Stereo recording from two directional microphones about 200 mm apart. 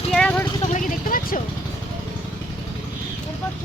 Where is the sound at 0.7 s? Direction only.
45° left (ahead or behind).